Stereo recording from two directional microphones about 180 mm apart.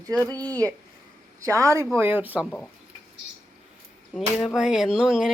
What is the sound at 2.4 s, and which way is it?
Speech, 10° left (ahead or behind).